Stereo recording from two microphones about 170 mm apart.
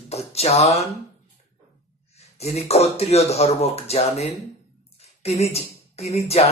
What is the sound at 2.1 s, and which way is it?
Speech, 40° left (ahead or behind).